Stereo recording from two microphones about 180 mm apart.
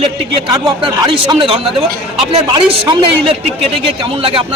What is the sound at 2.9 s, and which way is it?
A man's voice, 30° right (ahead or behind).